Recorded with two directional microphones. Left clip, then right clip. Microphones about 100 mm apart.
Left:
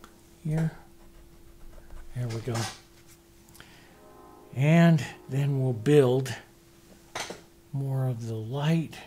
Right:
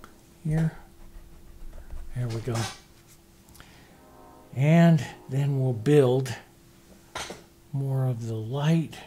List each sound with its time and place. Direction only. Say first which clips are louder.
0.0 s a sound: right 2 dB; 40° right (ahead or behind)
2.1 s speech: right 1 dB; 40° right (ahead or behind)
4.6 s speech: right 1 dB; 10° right (ahead or behind)
7.7 s speech: right 2 dB; 40° right (ahead or behind)